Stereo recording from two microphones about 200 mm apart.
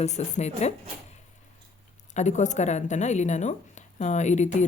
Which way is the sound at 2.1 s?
35° left (ahead or behind).